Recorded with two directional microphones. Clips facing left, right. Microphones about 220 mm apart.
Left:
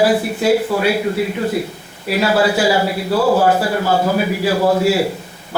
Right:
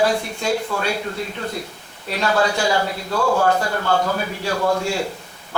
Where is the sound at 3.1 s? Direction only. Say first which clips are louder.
Left 5 dB; 30° left (ahead or behind).